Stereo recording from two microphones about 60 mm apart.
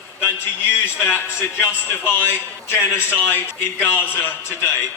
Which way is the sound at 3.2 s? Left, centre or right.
Left.